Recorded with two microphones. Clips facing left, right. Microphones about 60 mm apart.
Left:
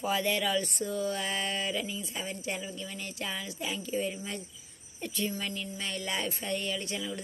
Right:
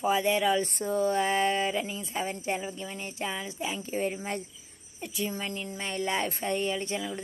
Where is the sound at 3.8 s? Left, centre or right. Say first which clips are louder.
Right 1 dB; right.